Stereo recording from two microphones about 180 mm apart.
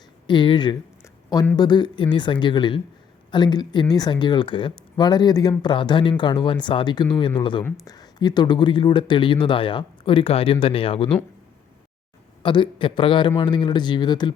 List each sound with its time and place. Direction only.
0.3 s speech: 25° left (ahead or behind)
12.4 s speech: 25° left (ahead or behind)